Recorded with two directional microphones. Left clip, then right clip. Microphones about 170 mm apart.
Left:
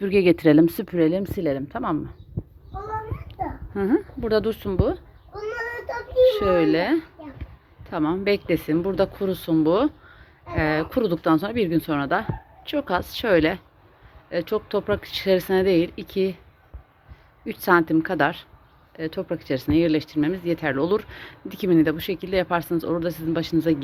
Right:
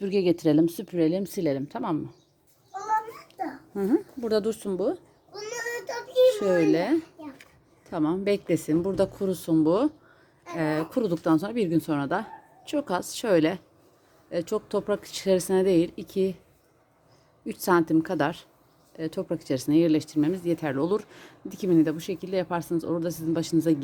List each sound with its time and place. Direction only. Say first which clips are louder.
0.0 s speech: left 6 dB; 5° right (ahead or behind)
3.8 s speech: left 3 dB; 10° right (ahead or behind)
6.2 s speech: left 3 dB; 15° right (ahead or behind)
17.4 s speech: left 4 dB; 15° right (ahead or behind)